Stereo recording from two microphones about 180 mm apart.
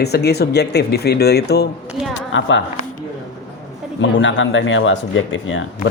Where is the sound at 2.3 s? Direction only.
90° left.